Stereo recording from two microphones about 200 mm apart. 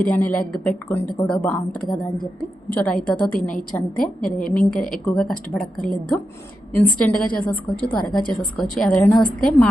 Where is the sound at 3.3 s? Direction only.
40° left (ahead or behind).